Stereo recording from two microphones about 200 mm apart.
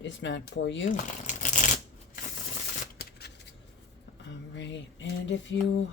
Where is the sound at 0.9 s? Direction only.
40° left (ahead or behind).